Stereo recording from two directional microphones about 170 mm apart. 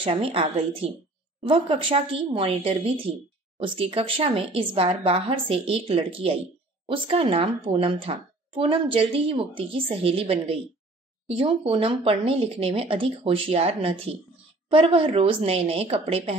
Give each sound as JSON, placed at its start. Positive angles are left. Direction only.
{"t": 0.0, "sound": "a woman's voice", "side_deg": -35}